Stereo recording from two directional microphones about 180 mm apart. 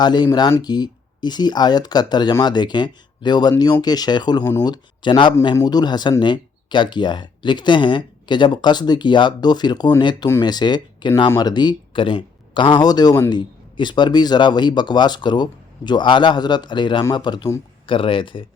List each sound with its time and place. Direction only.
0.0 s speech: 25° left (ahead or behind)